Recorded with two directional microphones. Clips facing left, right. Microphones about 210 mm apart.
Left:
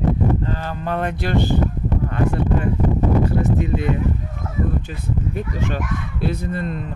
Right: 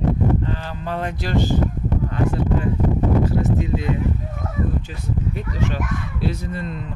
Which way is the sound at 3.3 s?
60° left (ahead or behind).